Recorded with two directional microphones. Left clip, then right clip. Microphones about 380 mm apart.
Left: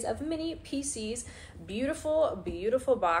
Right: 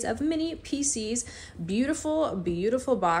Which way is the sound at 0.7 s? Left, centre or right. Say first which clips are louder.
Right 5 dB; centre.